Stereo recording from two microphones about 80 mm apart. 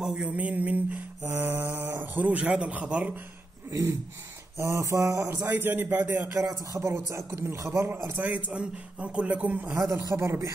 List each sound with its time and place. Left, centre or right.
0.0 s mantra: centre; by 1.6 s right
1.8 s speech: right
3.7 s a sound: right
4.6 s a man's voice: right
5.5 s a man's voice: right
6.3 s a man's voice: right
8.2 s speech: centre
9.7 s a man's voice: centre
10.1 s a man's voice: right